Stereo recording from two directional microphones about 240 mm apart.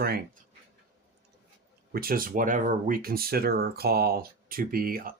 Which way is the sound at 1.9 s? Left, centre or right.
Right.